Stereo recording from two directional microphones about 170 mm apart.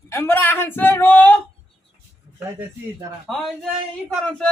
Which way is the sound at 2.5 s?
15° right (ahead or behind).